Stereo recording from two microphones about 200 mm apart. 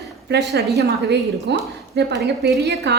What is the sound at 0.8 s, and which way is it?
Speech, 55° right (ahead or behind).